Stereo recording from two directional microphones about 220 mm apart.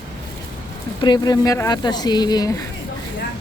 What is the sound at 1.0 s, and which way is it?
Speech, 20° left (ahead or behind).